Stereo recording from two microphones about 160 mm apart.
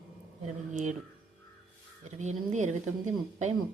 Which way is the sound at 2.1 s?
50° right (ahead or behind).